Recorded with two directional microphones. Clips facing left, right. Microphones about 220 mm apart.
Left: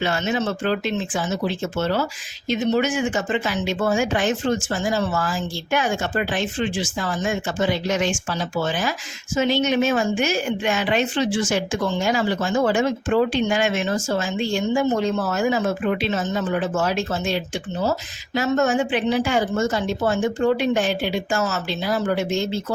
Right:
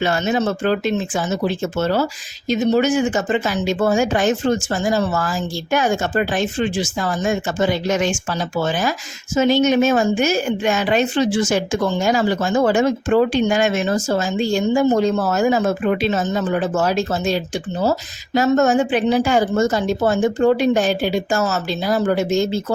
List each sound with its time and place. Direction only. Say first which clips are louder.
0.0 s speech: right 4 dB; 40° right (ahead or behind)